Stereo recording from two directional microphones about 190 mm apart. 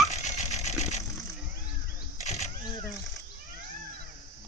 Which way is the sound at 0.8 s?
35° left (ahead or behind).